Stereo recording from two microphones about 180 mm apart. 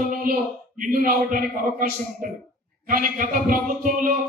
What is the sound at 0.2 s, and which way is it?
A man's voice, 50° right (ahead or behind).